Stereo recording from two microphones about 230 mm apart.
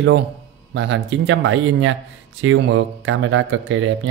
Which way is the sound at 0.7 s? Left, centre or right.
Right.